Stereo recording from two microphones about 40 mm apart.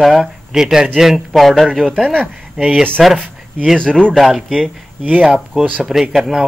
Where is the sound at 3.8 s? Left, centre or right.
Left.